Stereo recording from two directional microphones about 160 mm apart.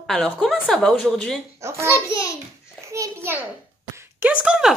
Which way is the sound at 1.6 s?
15° right (ahead or behind).